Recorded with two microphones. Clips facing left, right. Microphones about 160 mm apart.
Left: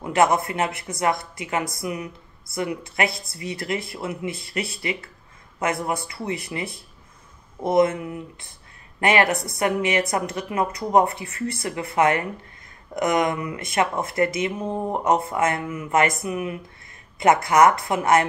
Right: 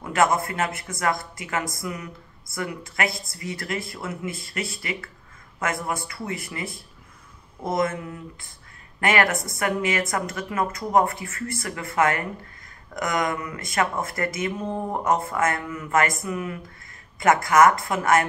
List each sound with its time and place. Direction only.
0.0 s speech: 20° left (ahead or behind)
7.6 s speech: 25° left (ahead or behind)